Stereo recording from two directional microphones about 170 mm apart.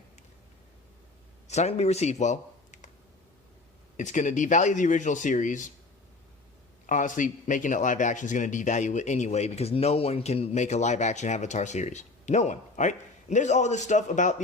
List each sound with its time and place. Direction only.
1.5 s speech: 40° left (ahead or behind)
3.9 s a man's voice: 45° left (ahead or behind)
6.8 s a man's voice: 50° left (ahead or behind)